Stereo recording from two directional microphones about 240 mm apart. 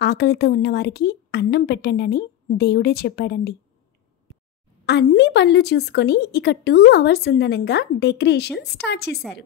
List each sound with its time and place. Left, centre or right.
0.0 s a woman's voice: left
4.3 s a sound: centre
4.8 s a woman's voice: left